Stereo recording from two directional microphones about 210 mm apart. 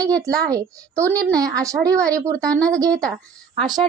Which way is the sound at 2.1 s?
15° right (ahead or behind).